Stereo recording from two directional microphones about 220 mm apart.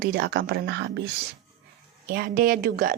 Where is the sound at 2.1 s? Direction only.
40° right (ahead or behind).